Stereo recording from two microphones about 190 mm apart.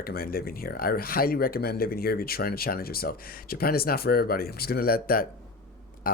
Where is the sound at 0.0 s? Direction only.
50° left (ahead or behind).